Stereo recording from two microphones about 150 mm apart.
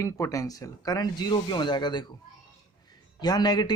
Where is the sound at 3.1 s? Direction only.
30° left (ahead or behind).